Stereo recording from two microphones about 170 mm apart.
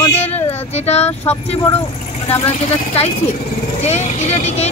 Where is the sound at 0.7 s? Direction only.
40° left (ahead or behind).